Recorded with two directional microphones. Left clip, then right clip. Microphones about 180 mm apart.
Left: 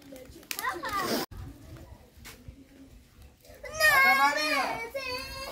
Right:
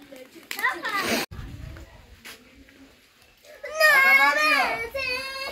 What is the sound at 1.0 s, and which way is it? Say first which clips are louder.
Music: right 5 dB; 10° left (ahead or behind).